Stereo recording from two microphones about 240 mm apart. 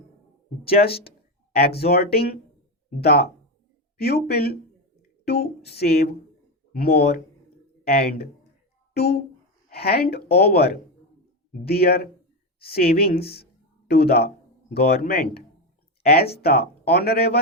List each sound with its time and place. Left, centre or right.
0.6 s speech: left